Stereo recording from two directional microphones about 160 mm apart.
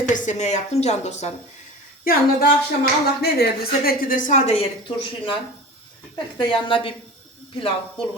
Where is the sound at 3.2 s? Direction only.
80° left; by 4.6 s 45° left (ahead or behind).